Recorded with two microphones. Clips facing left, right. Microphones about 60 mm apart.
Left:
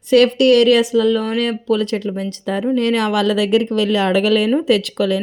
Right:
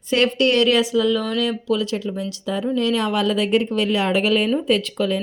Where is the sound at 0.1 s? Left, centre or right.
Left.